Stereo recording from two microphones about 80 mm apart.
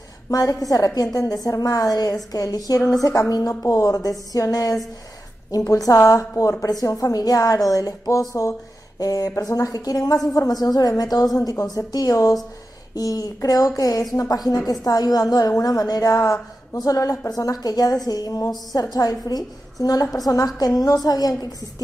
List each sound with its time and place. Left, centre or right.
0.3 s a woman's voice: left